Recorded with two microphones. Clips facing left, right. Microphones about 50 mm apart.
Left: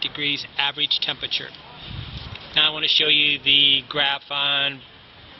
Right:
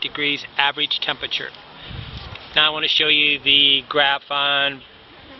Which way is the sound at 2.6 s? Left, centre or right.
Centre.